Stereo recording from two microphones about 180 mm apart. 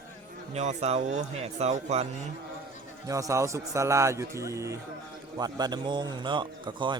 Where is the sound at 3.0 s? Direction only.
20° right (ahead or behind).